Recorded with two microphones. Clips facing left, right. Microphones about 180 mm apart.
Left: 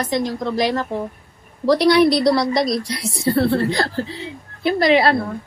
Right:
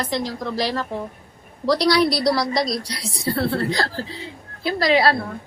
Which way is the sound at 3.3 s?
20° left (ahead or behind).